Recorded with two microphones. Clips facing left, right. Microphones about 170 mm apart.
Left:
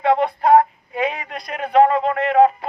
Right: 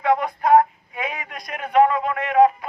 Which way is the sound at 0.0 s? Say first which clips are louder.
Left 3 dB; 30° left (ahead or behind).